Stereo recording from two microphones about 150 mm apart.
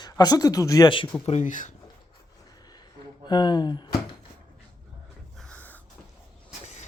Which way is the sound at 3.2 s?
30° left (ahead or behind).